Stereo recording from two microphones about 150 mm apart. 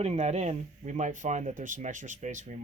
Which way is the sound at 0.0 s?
45° right (ahead or behind).